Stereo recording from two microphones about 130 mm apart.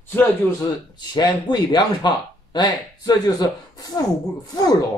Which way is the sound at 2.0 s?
35° left (ahead or behind).